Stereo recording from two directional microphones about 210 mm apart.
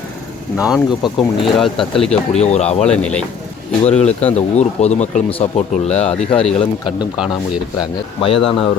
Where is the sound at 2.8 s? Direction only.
5° left (ahead or behind).